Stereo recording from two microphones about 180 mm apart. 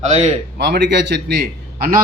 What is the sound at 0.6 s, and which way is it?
A man's voice, 70° right (ahead or behind).